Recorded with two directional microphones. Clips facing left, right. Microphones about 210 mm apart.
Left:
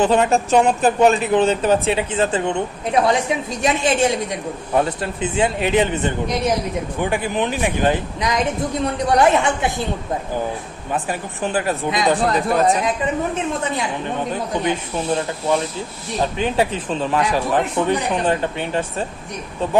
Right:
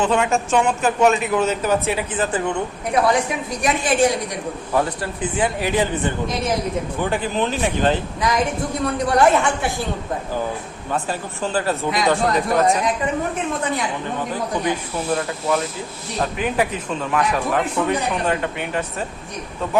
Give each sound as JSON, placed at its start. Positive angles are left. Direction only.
{"t": 0.0, "sound": "a woman's voice", "side_deg": 35}
{"t": 10.9, "sound": "speech", "side_deg": 15}
{"t": 14.6, "sound": "a woman's voice", "side_deg": 25}